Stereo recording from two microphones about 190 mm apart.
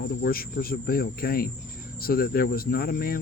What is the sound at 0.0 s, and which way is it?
Speech, 55° left (ahead or behind).